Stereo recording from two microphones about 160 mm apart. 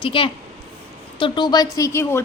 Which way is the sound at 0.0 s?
35° left (ahead or behind).